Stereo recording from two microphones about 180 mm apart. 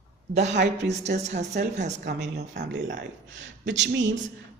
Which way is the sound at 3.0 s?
85° right.